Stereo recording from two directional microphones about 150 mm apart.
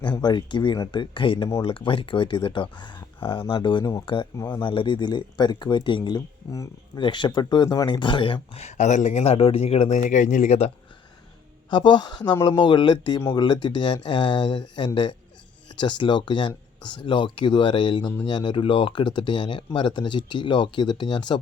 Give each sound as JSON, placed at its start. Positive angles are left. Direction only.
{"t": 0.0, "sound": "speech", "side_deg": 30}
{"t": 4.4, "sound": "speech", "side_deg": 15}
{"t": 4.6, "sound": "speech", "side_deg": 35}
{"t": 11.7, "sound": "speech", "side_deg": 30}